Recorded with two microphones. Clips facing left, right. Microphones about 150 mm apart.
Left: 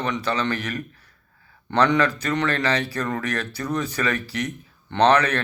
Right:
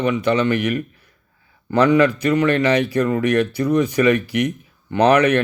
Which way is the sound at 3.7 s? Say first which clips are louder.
Right 9 dB; 15° right (ahead or behind).